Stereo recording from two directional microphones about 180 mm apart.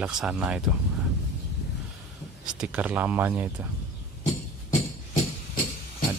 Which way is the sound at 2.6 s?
5° right (ahead or behind).